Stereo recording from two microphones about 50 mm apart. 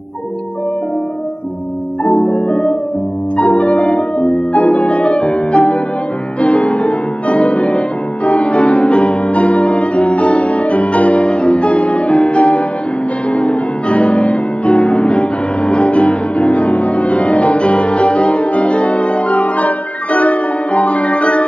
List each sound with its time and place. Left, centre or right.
3.3 s music: left